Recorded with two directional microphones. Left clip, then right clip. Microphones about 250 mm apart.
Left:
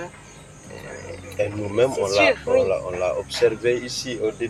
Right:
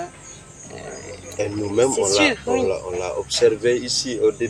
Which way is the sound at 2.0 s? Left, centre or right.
Right.